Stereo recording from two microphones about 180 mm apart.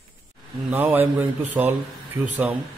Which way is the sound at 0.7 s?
10° right (ahead or behind).